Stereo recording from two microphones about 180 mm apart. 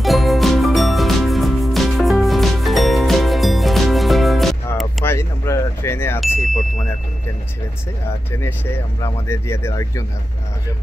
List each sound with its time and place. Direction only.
0.0 s music: centre (ahead or behind)
5.0 s a sound: 15° left (ahead or behind)
6.2 s music: centre (ahead or behind)
9.0 s speech: 15° left (ahead or behind)